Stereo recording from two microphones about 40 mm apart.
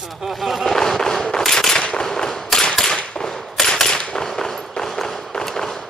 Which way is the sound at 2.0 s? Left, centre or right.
Centre.